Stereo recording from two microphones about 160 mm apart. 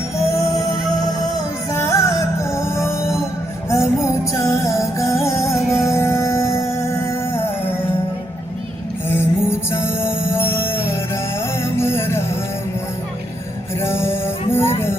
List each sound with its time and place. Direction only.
0.3 s music: 20° left (ahead or behind)
1.7 s music: 20° left (ahead or behind)
9.0 s music: 15° left (ahead or behind)
13.8 s music: 15° left (ahead or behind)